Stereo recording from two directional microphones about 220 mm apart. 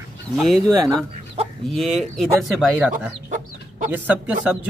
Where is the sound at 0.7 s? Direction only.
15° right (ahead or behind).